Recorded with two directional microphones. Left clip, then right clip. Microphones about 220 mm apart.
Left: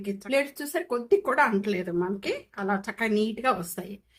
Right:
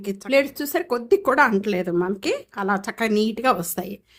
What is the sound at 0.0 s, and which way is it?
Speech, 45° right (ahead or behind).